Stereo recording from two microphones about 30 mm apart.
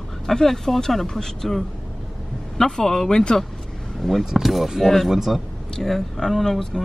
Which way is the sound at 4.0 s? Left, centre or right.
Centre.